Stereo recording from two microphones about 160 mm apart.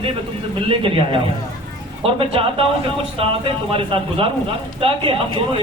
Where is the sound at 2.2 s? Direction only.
35° right (ahead or behind).